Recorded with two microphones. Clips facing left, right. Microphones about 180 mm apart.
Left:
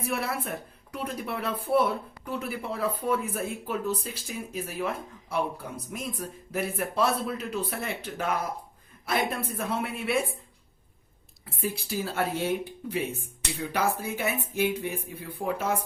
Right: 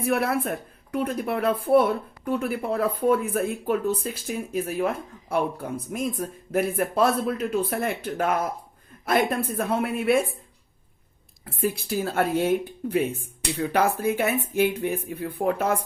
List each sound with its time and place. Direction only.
0.1 s speech: 55° right (ahead or behind)
11.4 s speech: 55° right (ahead or behind)